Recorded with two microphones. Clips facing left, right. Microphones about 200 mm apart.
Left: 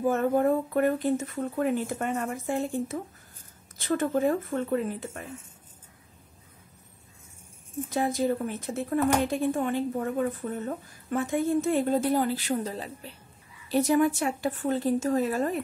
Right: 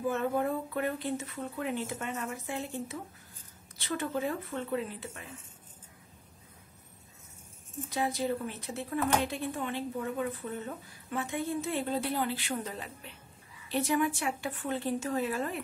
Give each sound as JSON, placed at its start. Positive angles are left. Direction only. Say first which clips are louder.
{"t": 0.0, "sound": "a woman's voice", "louder": "left 6 dB", "side_deg": 45}
{"t": 7.9, "sound": "a woman's voice", "louder": "left 5 dB", "side_deg": 50}